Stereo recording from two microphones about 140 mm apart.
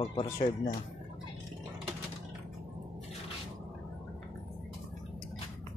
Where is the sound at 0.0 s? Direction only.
40° left (ahead or behind).